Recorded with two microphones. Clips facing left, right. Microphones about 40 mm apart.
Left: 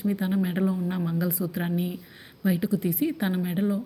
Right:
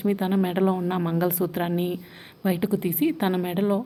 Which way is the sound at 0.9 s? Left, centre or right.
Right.